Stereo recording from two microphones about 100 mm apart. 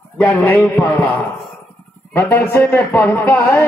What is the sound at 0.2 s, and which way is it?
Speech, 15° left (ahead or behind).